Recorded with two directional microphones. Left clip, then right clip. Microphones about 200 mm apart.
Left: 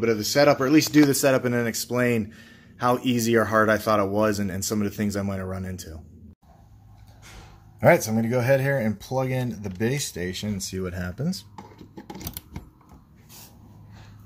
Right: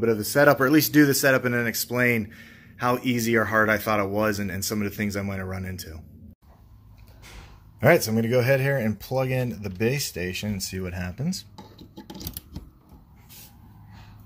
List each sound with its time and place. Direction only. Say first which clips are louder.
0.0 s speech: even; centre (ahead or behind)
7.8 s speech: left 1 dB; centre (ahead or behind)